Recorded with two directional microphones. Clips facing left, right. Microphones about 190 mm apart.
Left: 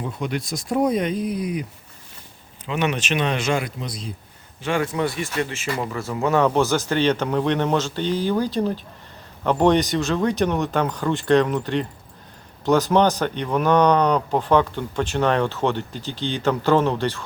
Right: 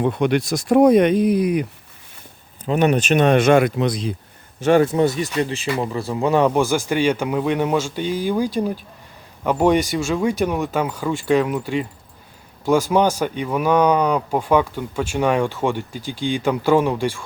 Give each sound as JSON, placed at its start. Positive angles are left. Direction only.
{"t": 0.0, "sound": "speech", "side_deg": -70}
{"t": 2.6, "sound": "speech", "side_deg": -40}
{"t": 4.8, "sound": "speech", "side_deg": -30}
{"t": 5.0, "sound": "speech", "side_deg": -40}
{"t": 6.1, "sound": "speech", "side_deg": -15}